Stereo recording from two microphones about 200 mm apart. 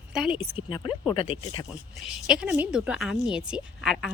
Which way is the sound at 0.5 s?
25° left (ahead or behind).